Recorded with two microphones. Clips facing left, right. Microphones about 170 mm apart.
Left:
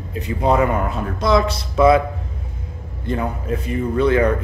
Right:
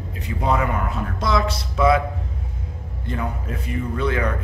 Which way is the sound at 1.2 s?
25° left (ahead or behind).